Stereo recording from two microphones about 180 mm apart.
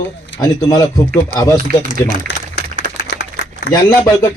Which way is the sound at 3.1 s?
70° left (ahead or behind).